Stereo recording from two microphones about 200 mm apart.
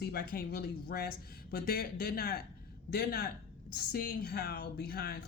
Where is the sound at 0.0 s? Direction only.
50° left (ahead or behind).